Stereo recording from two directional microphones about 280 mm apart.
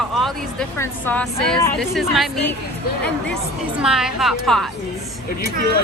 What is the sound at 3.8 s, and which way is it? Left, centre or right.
Speech, centre.